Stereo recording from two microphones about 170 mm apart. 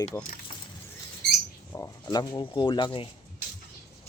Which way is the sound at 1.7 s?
20° left (ahead or behind).